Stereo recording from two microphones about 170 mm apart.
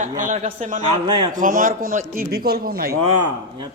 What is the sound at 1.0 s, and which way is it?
Speech, 25° right (ahead or behind).